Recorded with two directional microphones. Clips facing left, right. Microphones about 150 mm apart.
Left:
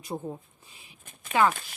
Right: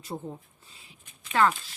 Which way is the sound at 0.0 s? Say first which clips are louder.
Left 2 dB; 15° left (ahead or behind).